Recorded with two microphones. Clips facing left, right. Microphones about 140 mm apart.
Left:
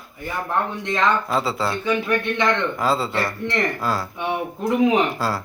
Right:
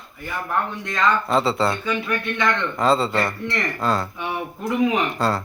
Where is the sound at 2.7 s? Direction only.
5° left (ahead or behind).